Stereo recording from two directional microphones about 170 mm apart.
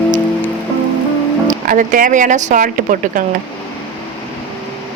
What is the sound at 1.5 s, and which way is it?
A woman's voice, 50° right (ahead or behind).